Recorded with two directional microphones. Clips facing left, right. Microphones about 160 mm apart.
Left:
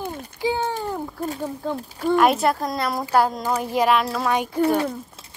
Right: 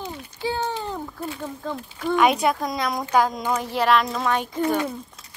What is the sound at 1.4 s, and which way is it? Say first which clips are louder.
Speech: left 3 dB; 15° left (ahead or behind).